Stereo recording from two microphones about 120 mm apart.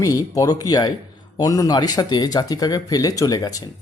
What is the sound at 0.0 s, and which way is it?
Speech, 30° left (ahead or behind).